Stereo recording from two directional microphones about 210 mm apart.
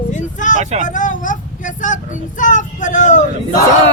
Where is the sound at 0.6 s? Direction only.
35° right (ahead or behind).